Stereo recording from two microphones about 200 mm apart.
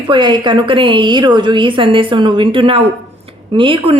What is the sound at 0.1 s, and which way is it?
A woman's voice, 20° right (ahead or behind).